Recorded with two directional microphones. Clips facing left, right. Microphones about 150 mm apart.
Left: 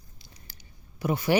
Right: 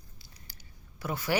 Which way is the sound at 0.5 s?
20° left (ahead or behind).